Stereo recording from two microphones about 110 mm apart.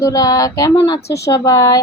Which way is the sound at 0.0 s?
35° left (ahead or behind).